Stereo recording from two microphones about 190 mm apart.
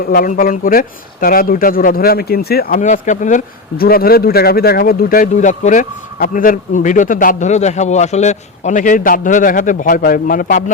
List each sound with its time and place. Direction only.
0.1 s speech: 50° left (ahead or behind)